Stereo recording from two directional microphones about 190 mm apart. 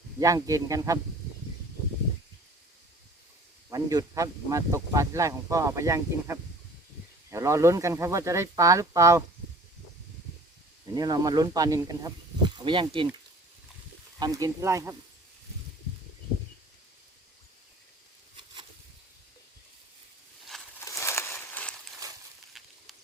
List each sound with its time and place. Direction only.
0.2 s speech: 15° right (ahead or behind)
3.7 s speech: 20° right (ahead or behind)
10.9 s speech: 20° right (ahead or behind)
14.2 s speech: 20° right (ahead or behind)
20.8 s a sound: 15° left (ahead or behind)
22.0 s a sound: 15° right (ahead or behind)